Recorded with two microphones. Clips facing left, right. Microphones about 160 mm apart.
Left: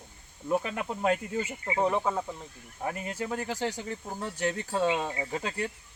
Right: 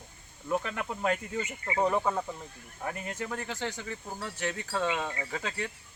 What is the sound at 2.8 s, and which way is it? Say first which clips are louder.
Speech: left 3 dB; 15° left (ahead or behind).